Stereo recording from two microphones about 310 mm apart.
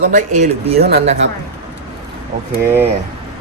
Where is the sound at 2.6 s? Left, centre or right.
Centre.